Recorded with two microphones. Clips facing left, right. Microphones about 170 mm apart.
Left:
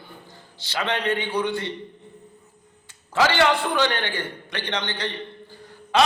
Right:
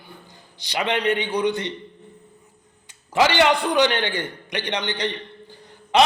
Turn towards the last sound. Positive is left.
turn(degrees=-20)  # may be behind; listen again after turning